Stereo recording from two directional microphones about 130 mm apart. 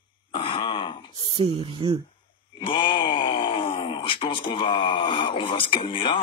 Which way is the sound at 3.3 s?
40° left (ahead or behind).